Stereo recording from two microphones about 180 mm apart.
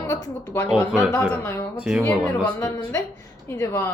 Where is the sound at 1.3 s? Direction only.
15° left (ahead or behind).